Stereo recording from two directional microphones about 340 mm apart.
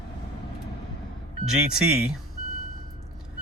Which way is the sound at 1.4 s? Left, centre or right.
Centre.